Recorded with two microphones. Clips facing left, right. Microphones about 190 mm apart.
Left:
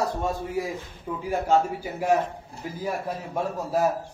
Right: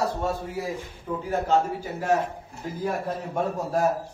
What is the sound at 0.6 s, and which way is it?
A man's voice, 15° left (ahead or behind).